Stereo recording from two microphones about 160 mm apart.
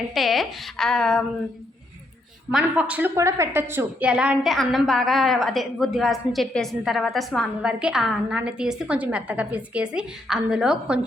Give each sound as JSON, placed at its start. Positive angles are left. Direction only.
{"t": 0.1, "sound": "a woman's voice", "side_deg": 0}
{"t": 2.5, "sound": "a woman's voice", "side_deg": -5}